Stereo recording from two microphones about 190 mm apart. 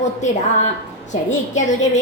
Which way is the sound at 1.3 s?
40° left (ahead or behind).